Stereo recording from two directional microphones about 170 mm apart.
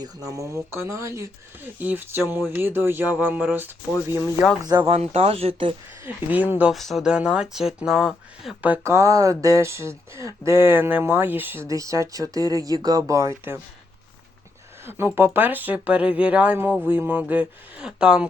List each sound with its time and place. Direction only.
0.0 s speech: 20° right (ahead or behind)
4.6 s speech: 25° right (ahead or behind)
4.9 s speech: 35° right (ahead or behind)
6.3 s speech: 10° right (ahead or behind)
14.8 s speech: 15° right (ahead or behind)